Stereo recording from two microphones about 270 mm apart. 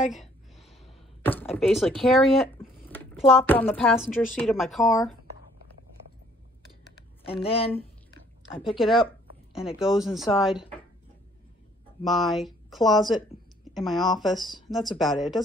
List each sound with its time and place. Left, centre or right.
1.2 s a woman's voice: centre
2.9 s a sound: centre
3.3 s a woman's voice: centre
7.2 s speech: centre
8.6 s a woman's voice: centre
12.0 s a woman's voice: centre